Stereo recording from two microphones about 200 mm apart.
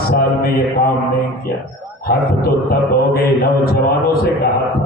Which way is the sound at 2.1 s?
50° left (ahead or behind).